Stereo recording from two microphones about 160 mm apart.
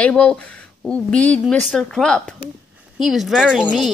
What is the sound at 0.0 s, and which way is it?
Speech, 5° left (ahead or behind).